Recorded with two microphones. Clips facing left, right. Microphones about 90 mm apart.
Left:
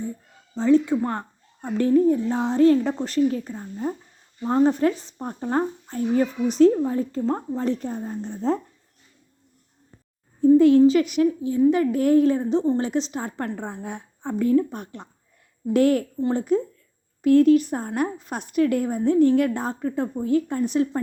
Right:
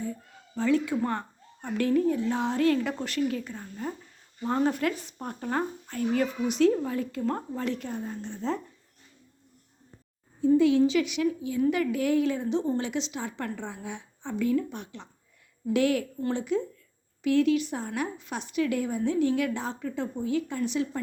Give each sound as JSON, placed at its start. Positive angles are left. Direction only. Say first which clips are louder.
{"t": 0.5, "sound": "a woman's voice", "louder": "left 7 dB", "side_deg": 30}
{"t": 10.6, "sound": "a woman's voice", "louder": "left 7 dB", "side_deg": 45}